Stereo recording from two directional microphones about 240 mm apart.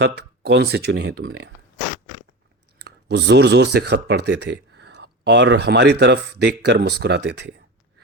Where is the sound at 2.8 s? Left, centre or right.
Right.